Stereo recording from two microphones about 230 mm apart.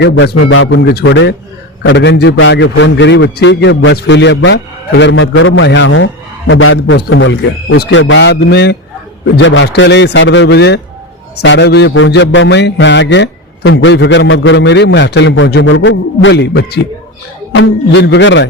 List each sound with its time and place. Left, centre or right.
0.0 s a man's voice: left